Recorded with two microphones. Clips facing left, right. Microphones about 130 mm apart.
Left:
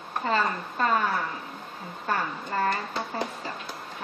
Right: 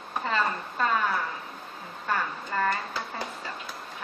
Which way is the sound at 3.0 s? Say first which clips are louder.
Left 3 dB; 30° left (ahead or behind).